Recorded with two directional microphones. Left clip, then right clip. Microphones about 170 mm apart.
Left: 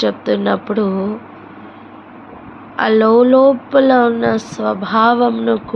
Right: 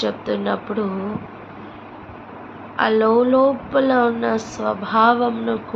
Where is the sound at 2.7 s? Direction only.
55° left (ahead or behind).